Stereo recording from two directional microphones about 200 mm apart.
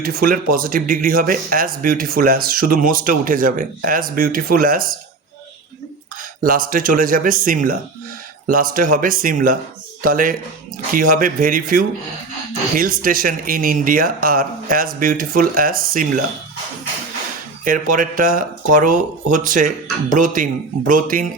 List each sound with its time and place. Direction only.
0.0 s speech: 45° right (ahead or behind)
6.4 s speech: 45° right (ahead or behind)
17.7 s speech: 40° right (ahead or behind)